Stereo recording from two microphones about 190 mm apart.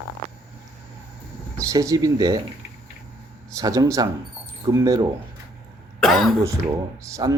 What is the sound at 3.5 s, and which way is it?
Speech, 20° right (ahead or behind).